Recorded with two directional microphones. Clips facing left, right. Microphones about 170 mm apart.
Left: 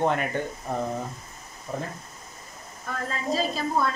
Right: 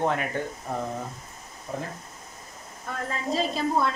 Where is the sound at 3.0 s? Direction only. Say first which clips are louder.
Even; 25° right (ahead or behind).